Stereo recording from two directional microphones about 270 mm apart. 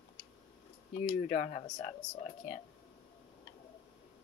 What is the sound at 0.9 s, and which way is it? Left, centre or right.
Speech, left.